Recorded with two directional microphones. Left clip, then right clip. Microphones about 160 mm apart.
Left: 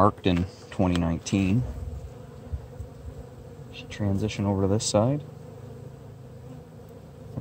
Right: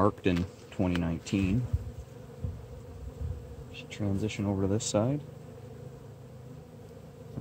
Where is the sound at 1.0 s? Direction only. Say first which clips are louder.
Left 5 dB; 55° left (ahead or behind).